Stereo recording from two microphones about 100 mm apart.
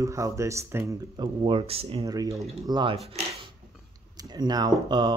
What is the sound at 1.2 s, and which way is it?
Speech, 55° right (ahead or behind).